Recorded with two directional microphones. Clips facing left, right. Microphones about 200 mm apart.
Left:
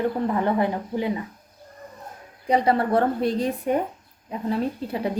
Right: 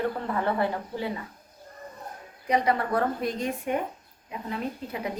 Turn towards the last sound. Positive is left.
turn(degrees=30)  # may be behind; listen again after turning